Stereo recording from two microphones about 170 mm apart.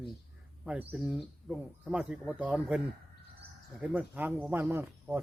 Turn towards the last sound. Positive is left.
turn(degrees=-10)  # may be behind; listen again after turning